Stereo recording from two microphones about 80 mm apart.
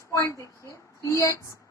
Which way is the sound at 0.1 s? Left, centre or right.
Left.